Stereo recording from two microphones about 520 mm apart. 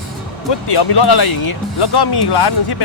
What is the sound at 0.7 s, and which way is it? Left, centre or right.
Speech, left.